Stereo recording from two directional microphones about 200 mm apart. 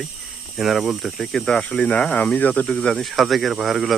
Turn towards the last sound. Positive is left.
turn(degrees=0)  # may be behind; listen again after turning